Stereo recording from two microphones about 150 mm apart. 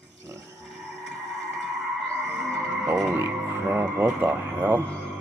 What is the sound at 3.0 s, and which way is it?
Music, 15° right (ahead or behind).